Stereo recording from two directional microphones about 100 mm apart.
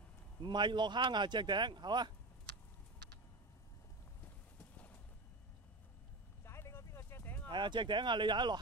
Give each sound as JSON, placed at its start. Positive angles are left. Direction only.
{"t": 0.4, "sound": "speech", "side_deg": -50}
{"t": 6.4, "sound": "vehicle", "side_deg": 25}
{"t": 7.4, "sound": "speech", "side_deg": -50}